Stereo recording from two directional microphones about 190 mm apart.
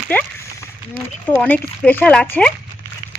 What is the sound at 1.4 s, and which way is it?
Speech, 10° left (ahead or behind).